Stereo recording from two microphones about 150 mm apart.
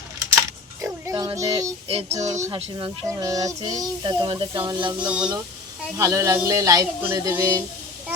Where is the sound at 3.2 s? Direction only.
20° right (ahead or behind).